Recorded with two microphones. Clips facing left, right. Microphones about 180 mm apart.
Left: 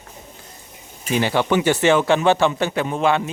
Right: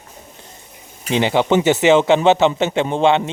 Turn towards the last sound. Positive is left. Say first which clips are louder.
# right 4 dB
turn(degrees=-25)  # may be behind; listen again after turning